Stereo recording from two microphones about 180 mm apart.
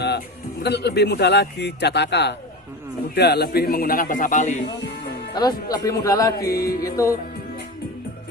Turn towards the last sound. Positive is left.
turn(degrees=20)  # may be behind; listen again after turning